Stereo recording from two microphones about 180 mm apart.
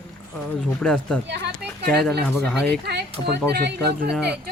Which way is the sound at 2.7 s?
65° right (ahead or behind).